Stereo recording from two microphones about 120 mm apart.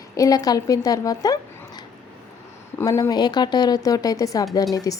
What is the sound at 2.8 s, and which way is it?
A woman's voice, 30° left (ahead or behind).